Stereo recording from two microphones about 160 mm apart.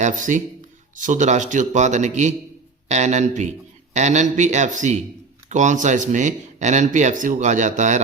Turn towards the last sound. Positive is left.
turn(degrees=-50)  # may be behind; listen again after turning